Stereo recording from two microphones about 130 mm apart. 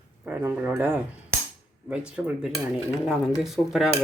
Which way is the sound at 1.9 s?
5° right (ahead or behind).